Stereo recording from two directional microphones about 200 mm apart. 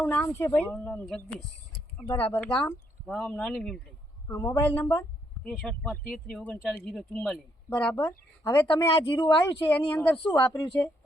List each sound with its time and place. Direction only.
0.0 s a woman's voice: 10° left (ahead or behind)
4.3 s a woman's voice: 15° left (ahead or behind)
5.4 s a woman's voice: 5° left (ahead or behind)